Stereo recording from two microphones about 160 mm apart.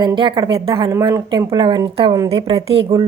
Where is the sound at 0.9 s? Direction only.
20° right (ahead or behind).